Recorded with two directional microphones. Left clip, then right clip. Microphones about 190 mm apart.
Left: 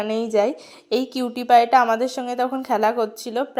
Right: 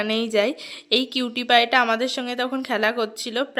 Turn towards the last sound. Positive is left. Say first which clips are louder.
# left 1 dB
turn(degrees=-5)  # may be behind; listen again after turning